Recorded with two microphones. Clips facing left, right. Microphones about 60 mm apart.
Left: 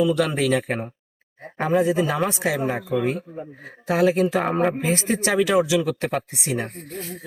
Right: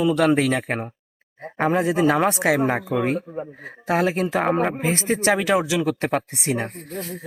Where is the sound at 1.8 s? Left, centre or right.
Right.